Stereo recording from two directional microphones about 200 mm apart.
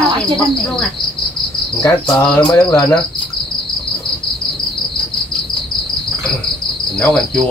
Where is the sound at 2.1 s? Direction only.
10° left (ahead or behind).